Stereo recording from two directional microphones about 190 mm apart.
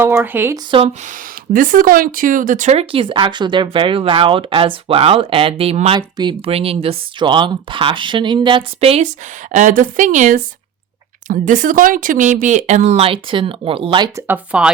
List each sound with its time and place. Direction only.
0.0 s speech: 10° right (ahead or behind)
0.7 s speech: 30° right (ahead or behind)
1.5 s speech: 45° right (ahead or behind); by 14.3 s 25° right (ahead or behind)
14.3 s speech: 5° right (ahead or behind)